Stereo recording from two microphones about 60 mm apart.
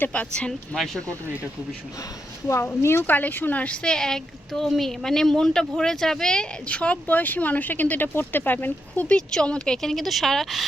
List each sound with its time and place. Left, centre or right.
0.0 s speech: left
2.8 s speech: left
3.1 s speech: left
3.8 s a woman's voice: centre; by 9.1 s left
9.1 s a woman's voice: centre